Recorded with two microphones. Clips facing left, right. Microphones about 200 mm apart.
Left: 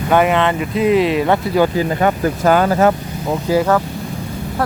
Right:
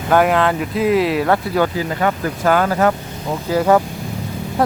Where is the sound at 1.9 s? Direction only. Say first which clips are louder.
Left 3 dB; 30° left (ahead or behind).